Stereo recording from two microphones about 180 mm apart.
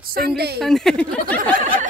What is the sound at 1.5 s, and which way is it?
Snicker, 50° right (ahead or behind).